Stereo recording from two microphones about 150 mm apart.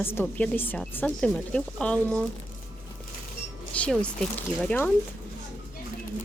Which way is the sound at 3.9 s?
5° left (ahead or behind).